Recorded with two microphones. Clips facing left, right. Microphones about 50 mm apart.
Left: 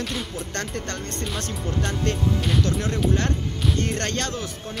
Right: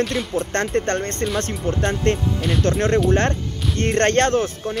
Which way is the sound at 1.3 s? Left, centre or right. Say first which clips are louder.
Right 5 dB; right.